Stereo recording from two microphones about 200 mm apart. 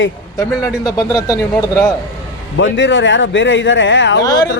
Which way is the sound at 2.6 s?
65° left (ahead or behind).